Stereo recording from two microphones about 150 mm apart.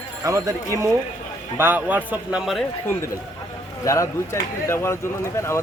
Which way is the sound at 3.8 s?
20° left (ahead or behind).